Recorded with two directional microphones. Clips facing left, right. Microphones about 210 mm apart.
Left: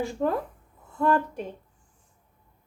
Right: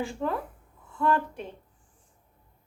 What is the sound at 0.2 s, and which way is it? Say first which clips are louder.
Speech: left 4 dB; 45° left (ahead or behind).